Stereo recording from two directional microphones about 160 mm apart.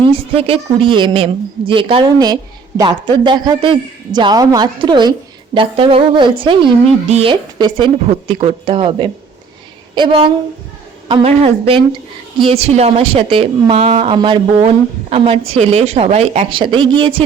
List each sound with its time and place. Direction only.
0.1 s a woman's voice: 35° right (ahead or behind)